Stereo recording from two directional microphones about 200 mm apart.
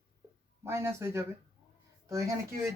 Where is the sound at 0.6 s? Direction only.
15° right (ahead or behind).